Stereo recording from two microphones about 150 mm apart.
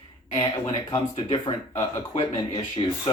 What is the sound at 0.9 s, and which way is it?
Speech, 35° left (ahead or behind).